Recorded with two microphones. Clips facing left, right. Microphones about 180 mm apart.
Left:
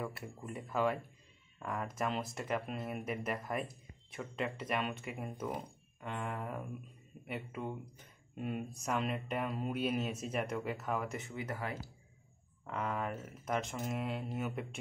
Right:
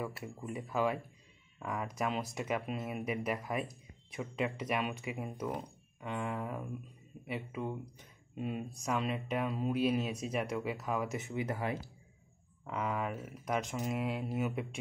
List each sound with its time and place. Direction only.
0.4 s speech: 5° right (ahead or behind)
11.1 s speech: 15° right (ahead or behind)
12.6 s speech: 5° right (ahead or behind)